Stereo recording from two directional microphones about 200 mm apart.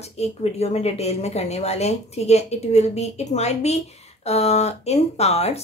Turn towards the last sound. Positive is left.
turn(degrees=30)  # may be behind; listen again after turning